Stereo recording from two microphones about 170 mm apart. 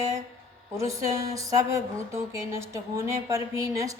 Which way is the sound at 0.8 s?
20° right (ahead or behind).